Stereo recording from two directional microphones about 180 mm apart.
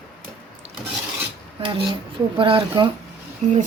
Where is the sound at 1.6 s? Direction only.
30° right (ahead or behind).